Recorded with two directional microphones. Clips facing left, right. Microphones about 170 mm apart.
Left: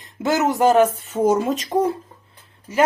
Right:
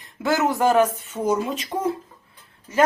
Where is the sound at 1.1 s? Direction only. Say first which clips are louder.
Left 5 dB; 45° left (ahead or behind).